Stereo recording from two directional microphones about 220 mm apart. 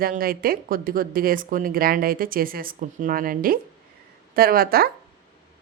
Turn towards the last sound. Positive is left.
turn(degrees=-40)  # may be behind; listen again after turning